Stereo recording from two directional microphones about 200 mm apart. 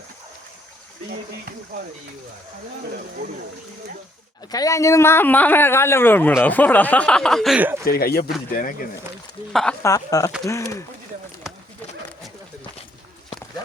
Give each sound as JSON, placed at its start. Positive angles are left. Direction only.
{"t": 4.5, "sound": "speech", "side_deg": 15}
{"t": 7.9, "sound": "speech", "side_deg": 50}
{"t": 9.5, "sound": "speech", "side_deg": 0}
{"t": 9.8, "sound": "speech", "side_deg": 15}